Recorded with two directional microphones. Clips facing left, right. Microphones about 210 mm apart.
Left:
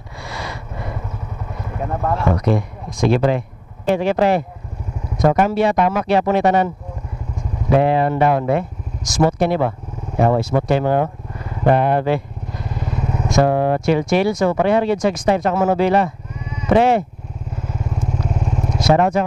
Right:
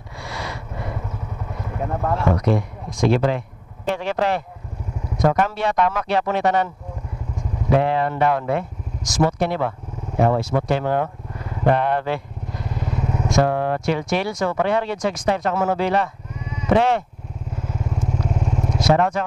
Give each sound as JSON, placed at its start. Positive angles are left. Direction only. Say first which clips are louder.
{"t": 0.2, "sound": "a sound", "louder": "left 1 dB", "side_deg": 15}
{"t": 1.8, "sound": "speech", "louder": "left 2 dB", "side_deg": 25}
{"t": 3.0, "sound": "speech", "louder": "left 2 dB", "side_deg": 10}
{"t": 7.8, "sound": "speech", "louder": "left 4 dB", "side_deg": 10}
{"t": 13.4, "sound": "speech", "louder": "left 4 dB", "side_deg": 10}
{"t": 18.1, "sound": "vehicle", "louder": "left 1 dB", "side_deg": 30}
{"t": 18.9, "sound": "speech", "louder": "left 4 dB", "side_deg": 5}